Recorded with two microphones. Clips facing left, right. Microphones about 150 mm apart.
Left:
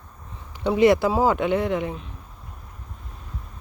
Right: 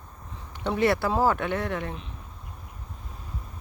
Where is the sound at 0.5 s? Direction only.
10° left (ahead or behind).